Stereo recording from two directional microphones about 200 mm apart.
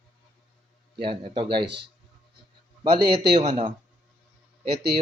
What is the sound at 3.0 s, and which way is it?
Speech, 55° right (ahead or behind).